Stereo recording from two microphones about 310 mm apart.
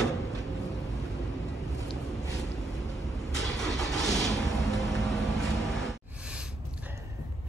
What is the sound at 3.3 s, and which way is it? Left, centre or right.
Vehicle, centre.